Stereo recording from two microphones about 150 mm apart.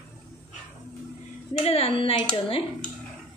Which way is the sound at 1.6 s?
45° left (ahead or behind).